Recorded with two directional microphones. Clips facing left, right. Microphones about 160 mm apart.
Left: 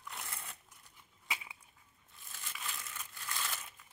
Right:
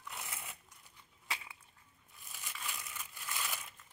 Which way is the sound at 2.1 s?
Centre (ahead or behind).